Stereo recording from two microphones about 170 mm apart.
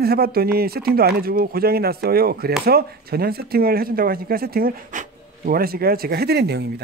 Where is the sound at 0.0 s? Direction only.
65° right (ahead or behind).